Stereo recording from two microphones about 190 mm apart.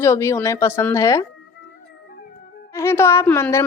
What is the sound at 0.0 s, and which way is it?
A woman's voice, 15° left (ahead or behind).